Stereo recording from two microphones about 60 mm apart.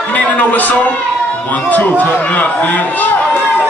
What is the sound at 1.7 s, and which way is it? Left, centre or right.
Speech, left.